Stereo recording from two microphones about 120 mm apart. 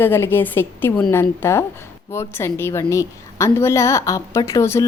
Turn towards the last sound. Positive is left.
turn(degrees=25)  # may be behind; listen again after turning